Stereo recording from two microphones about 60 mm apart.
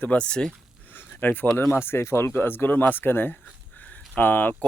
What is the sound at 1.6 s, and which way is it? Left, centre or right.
Speech, left.